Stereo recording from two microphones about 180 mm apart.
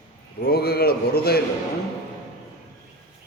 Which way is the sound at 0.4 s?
60° left (ahead or behind).